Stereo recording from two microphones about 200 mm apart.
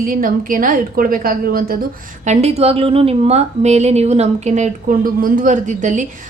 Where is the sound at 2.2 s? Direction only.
35° right (ahead or behind).